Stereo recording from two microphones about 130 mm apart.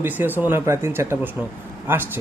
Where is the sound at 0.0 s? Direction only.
15° right (ahead or behind).